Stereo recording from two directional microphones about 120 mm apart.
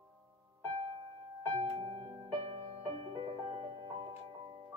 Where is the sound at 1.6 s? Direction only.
50° right (ahead or behind).